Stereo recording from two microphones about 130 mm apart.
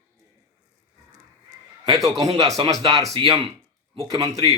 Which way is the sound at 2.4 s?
25° right (ahead or behind).